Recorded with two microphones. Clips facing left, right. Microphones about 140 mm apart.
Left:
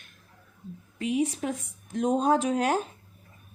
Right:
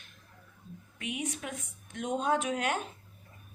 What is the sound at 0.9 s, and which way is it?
Speech, 30° left (ahead or behind).